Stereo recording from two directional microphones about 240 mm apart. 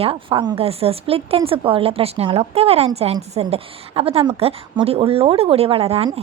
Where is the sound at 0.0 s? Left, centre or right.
Right.